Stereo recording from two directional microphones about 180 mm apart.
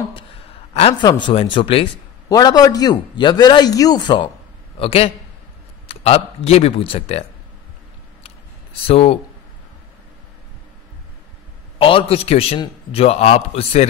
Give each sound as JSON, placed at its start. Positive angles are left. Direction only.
{"t": 1.0, "sound": "a man's voice", "side_deg": 25}
{"t": 8.8, "sound": "a man's voice", "side_deg": 30}
{"t": 11.8, "sound": "a man's voice", "side_deg": 30}